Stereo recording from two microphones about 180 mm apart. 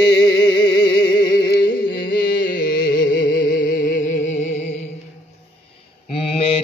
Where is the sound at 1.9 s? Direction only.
60° left (ahead or behind); by 4.7 s 40° left (ahead or behind).